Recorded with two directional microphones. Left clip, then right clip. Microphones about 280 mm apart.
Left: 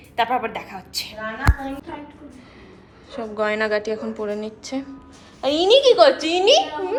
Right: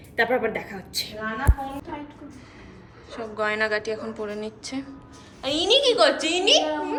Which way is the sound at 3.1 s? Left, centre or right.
Centre.